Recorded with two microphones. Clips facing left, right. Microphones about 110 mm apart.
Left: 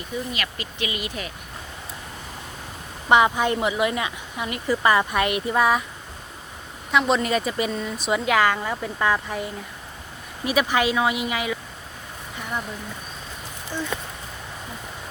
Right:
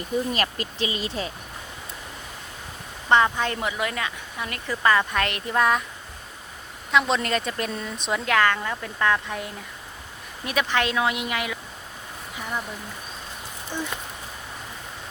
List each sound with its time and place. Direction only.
0.3 s speech: 40° right (ahead or behind)
3.1 s a woman's voice: 10° left (ahead or behind)
6.9 s speech: 5° left (ahead or behind)
13.7 s a sound: 15° right (ahead or behind)